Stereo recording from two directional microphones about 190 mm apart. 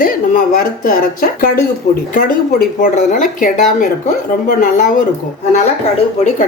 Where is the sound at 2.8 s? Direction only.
45° left (ahead or behind).